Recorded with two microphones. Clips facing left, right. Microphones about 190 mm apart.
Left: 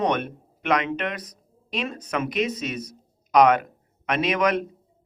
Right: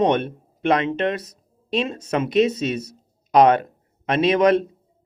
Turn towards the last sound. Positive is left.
turn(degrees=-30)  # may be behind; listen again after turning